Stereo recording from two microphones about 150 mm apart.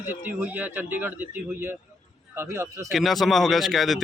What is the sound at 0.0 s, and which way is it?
Speech, 15° right (ahead or behind).